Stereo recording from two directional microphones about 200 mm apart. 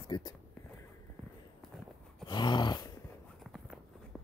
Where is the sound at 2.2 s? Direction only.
20° left (ahead or behind).